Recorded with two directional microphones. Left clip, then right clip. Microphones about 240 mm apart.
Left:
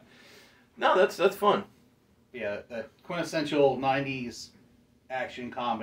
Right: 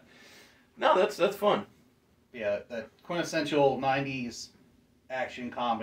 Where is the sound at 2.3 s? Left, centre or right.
Centre.